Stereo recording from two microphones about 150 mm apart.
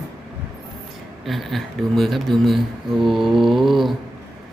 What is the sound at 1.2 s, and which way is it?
Speech, centre (ahead or behind).